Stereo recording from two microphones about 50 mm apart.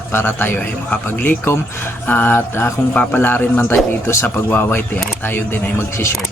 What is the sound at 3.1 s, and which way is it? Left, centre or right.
Speech, left.